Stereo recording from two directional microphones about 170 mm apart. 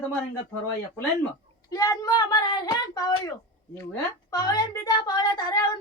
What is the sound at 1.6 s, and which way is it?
Speech, 20° left (ahead or behind).